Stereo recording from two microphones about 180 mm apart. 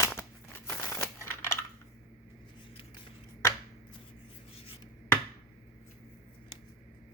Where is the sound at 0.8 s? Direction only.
15° left (ahead or behind).